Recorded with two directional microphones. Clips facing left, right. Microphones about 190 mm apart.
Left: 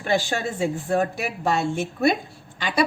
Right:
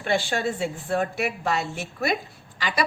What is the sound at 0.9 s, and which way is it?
A woman's voice, 40° left (ahead or behind).